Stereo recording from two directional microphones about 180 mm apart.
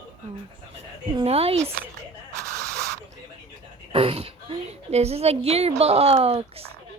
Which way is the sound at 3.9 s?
30° right (ahead or behind).